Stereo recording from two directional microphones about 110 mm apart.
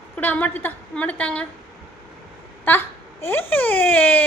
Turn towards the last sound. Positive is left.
turn(degrees=15)  # may be behind; listen again after turning